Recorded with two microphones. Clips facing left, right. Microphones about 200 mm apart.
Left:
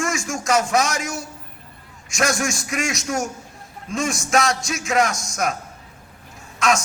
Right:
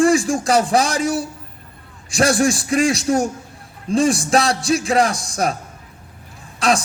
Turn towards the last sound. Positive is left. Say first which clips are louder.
# right 2 dB
turn(degrees=-35)  # may be behind; listen again after turning